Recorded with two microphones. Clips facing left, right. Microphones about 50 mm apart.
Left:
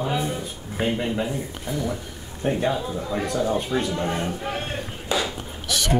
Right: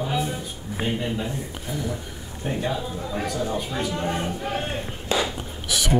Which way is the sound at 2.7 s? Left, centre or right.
Left.